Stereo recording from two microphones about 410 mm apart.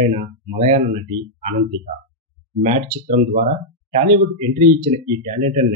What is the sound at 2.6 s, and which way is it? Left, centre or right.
Speech, centre.